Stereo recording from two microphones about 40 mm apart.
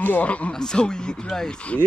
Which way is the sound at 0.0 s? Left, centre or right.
Left.